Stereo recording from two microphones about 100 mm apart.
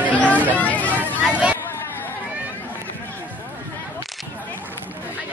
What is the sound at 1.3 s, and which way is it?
Chatter, 15° right (ahead or behind).